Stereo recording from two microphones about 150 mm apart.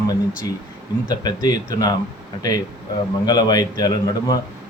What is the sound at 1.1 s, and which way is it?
Speech, 25° left (ahead or behind).